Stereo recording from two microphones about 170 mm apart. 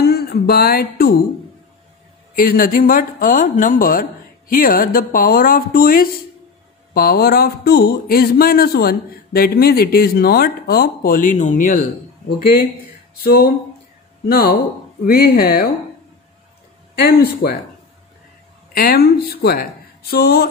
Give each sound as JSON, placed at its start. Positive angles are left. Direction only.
{"t": 0.0, "sound": "music", "side_deg": 65}
{"t": 2.3, "sound": "speech", "side_deg": 55}
{"t": 13.2, "sound": "speech", "side_deg": 65}
{"t": 16.9, "sound": "speech", "side_deg": 65}
{"t": 18.8, "sound": "speech", "side_deg": 65}